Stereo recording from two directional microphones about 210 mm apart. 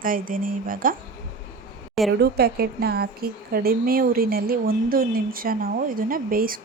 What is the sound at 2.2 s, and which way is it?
A woman's voice, 50° right (ahead or behind).